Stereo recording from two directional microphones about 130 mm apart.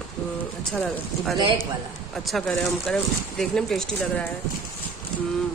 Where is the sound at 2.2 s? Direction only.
5° left (ahead or behind).